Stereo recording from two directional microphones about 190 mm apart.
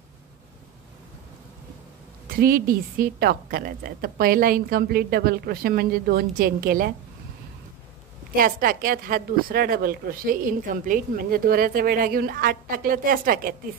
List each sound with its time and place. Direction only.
2.3 s speech: 50° right (ahead or behind)
8.4 s speech: 50° right (ahead or behind)